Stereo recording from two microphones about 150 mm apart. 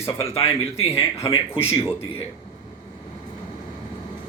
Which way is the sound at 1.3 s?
40° left (ahead or behind).